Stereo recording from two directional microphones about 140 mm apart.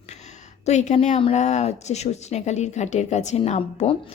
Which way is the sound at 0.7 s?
55° left (ahead or behind).